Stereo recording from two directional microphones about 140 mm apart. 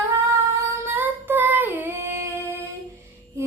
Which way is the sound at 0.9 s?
15° right (ahead or behind).